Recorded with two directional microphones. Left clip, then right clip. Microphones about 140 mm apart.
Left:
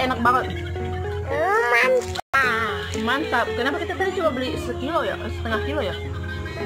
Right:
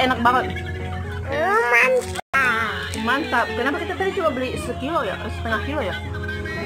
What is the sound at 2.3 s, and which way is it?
Music, 30° left (ahead or behind).